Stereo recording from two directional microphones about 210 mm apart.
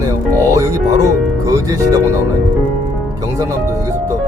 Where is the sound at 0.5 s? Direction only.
15° right (ahead or behind).